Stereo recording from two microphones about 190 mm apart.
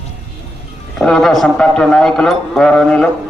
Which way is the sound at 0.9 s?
Centre (ahead or behind).